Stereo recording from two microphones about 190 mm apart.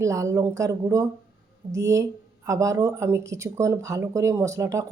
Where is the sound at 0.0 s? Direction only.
15° right (ahead or behind).